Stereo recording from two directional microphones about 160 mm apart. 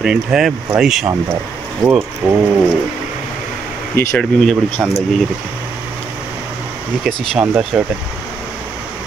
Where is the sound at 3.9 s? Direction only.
10° left (ahead or behind).